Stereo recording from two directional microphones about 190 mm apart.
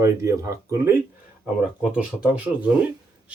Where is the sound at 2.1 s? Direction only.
5° right (ahead or behind).